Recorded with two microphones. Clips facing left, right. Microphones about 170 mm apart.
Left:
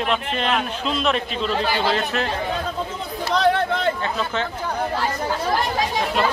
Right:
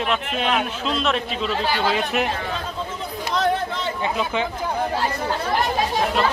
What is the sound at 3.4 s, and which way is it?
Chatter, 70° left (ahead or behind).